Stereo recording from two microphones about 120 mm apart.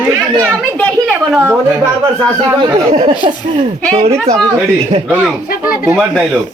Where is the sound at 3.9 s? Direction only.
60° right (ahead or behind).